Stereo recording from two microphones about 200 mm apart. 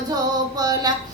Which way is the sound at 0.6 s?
20° right (ahead or behind).